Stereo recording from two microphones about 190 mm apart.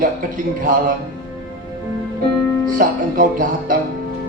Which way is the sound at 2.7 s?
50° right (ahead or behind).